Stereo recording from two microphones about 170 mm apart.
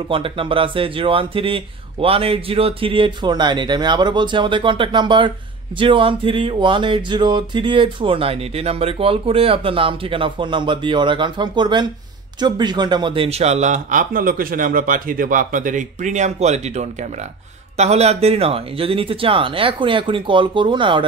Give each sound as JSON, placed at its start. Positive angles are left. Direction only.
{"t": 0.1, "sound": "speech", "side_deg": -30}